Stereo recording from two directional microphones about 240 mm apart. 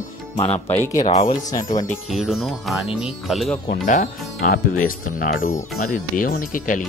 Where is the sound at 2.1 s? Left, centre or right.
Centre.